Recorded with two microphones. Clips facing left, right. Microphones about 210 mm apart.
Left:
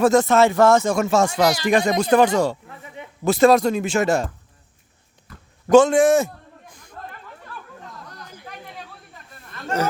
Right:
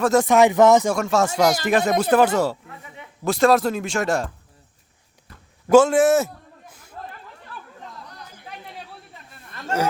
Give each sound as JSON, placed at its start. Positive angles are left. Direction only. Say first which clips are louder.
{"t": 0.1, "sound": "speech", "louder": "even", "side_deg": -10}
{"t": 0.9, "sound": "speech", "louder": "left 2 dB", "side_deg": 0}
{"t": 1.3, "sound": "speech", "louder": "even", "side_deg": -45}
{"t": 1.6, "sound": "speech", "louder": "left 1 dB", "side_deg": -5}
{"t": 5.6, "sound": "a sound", "louder": "left 1 dB", "side_deg": -5}